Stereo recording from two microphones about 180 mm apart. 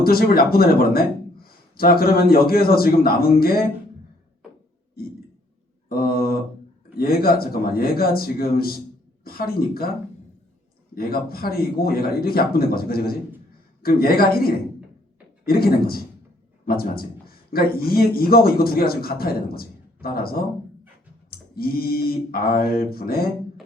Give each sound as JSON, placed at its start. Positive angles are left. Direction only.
{"t": 0.0, "sound": "a man's voice", "side_deg": 55}
{"t": 5.9, "sound": "a man's voice", "side_deg": 55}
{"t": 10.9, "sound": "a man's voice", "side_deg": 55}